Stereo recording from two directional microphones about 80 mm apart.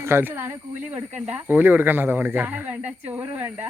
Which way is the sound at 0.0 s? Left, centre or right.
Right.